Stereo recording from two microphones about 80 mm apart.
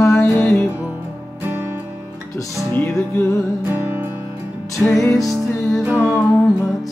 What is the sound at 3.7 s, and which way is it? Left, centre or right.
Music, right.